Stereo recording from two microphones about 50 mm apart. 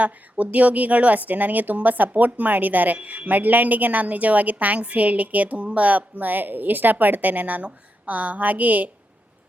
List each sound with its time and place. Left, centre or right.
0.0 s speech: right